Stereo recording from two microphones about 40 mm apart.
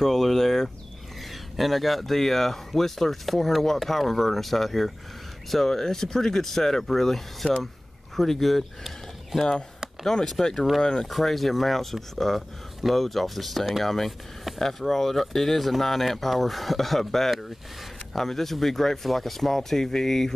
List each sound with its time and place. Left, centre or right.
0.0 s a sound: centre
1.3 s speech: centre
10.4 s speech: left
11.1 s speech: centre